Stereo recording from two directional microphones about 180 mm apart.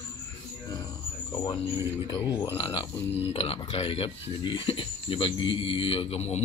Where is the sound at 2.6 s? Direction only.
30° left (ahead or behind).